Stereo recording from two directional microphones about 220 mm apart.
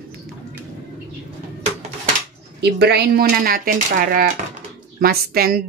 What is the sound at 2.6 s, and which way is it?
Speech, 50° right (ahead or behind).